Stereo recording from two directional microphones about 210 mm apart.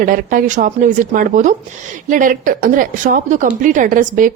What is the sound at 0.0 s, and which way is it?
A woman's voice, 40° right (ahead or behind).